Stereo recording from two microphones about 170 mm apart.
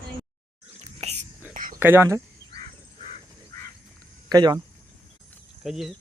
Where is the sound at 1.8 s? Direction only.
15° right (ahead or behind).